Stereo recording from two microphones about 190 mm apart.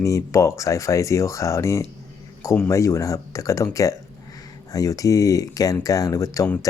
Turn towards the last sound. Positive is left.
turn(degrees=15)  # may be behind; listen again after turning